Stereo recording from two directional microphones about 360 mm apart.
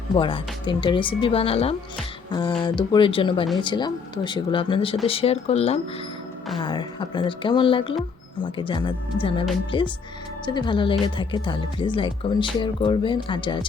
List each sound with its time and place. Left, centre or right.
0.1 s speech: centre